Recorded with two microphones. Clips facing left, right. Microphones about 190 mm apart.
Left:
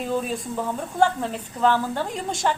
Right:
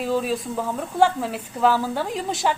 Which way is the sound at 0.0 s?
Centre (ahead or behind).